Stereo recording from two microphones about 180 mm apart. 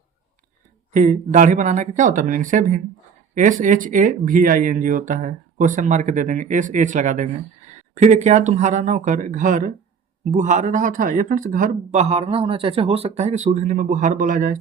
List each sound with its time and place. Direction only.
0.9 s speech: 45° right (ahead or behind)